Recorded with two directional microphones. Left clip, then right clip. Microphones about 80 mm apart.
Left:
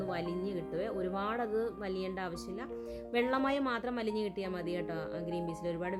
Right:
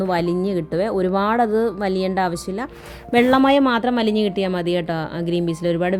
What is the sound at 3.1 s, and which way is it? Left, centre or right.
A woman's voice, centre.